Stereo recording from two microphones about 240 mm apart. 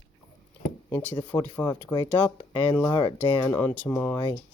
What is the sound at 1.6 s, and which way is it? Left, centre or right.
Speech, centre.